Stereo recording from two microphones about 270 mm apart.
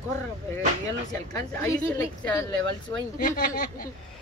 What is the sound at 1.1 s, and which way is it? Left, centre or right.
Speech, centre.